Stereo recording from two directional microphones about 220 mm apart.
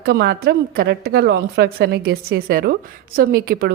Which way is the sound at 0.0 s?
45° right (ahead or behind).